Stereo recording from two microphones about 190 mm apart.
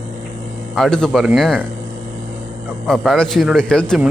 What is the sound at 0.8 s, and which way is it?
Speech, 5° left (ahead or behind).